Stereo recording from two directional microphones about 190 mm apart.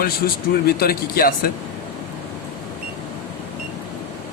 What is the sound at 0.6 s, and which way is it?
Speech, 55° left (ahead or behind).